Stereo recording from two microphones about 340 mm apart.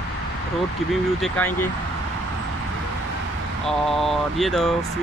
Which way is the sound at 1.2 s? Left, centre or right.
Centre.